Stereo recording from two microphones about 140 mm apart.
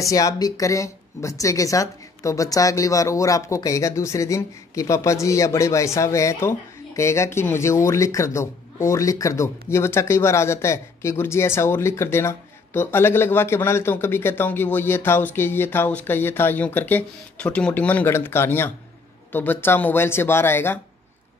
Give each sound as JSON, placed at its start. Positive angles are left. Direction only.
{"t": 0.0, "sound": "a woman's voice", "side_deg": 25}